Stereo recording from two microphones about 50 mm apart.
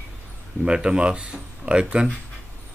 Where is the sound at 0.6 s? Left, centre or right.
Centre.